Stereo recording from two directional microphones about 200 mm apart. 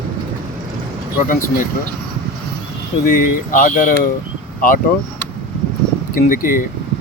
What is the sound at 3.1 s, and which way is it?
Speech, 45° left (ahead or behind).